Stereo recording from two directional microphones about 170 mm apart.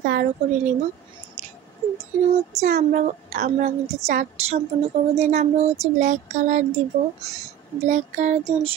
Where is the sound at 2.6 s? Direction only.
45° right (ahead or behind).